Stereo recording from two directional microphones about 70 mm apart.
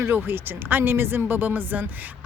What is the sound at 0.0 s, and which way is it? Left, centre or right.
Speech, right.